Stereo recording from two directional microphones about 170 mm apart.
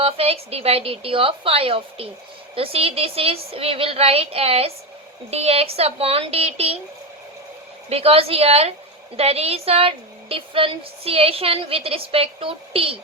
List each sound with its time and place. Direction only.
0.0 s a woman's voice: 35° right (ahead or behind)
7.9 s a woman's voice: 35° right (ahead or behind)